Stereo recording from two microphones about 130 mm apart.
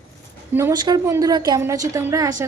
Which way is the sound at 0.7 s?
30° right (ahead or behind).